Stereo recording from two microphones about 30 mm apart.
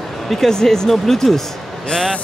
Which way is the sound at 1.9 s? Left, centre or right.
Left.